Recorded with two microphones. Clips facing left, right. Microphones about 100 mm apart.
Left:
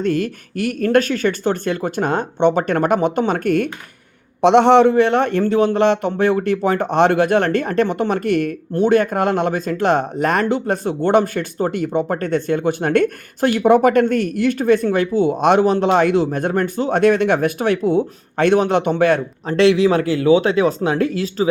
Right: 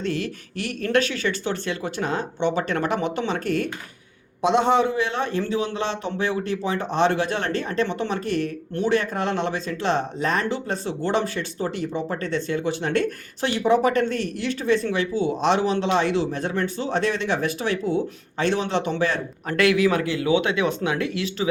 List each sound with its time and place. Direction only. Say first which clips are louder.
0.0 s speech: left 7 dB; 50° left (ahead or behind)
4.4 s a man's voice: left 8 dB; 70° left (ahead or behind)
8.7 s speech: left 8 dB; 45° left (ahead or behind)
19.5 s speech: left 6 dB; 25° left (ahead or behind)
20.0 s speech: left 7 dB; 40° left (ahead or behind)